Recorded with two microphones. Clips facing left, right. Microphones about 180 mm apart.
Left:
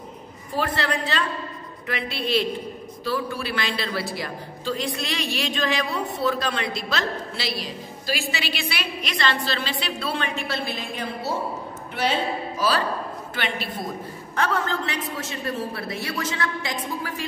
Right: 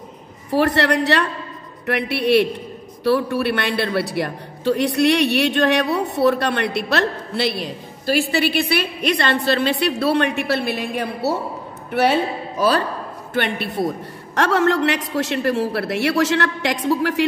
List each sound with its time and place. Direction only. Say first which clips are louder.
0.5 s a woman's voice: right 8 dB; 70° right (ahead or behind)
13.3 s a woman's voice: right 9 dB; 60° right (ahead or behind); by 17.2 s 85° right